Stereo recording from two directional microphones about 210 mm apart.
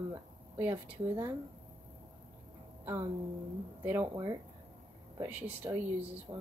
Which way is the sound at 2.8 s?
10° right (ahead or behind).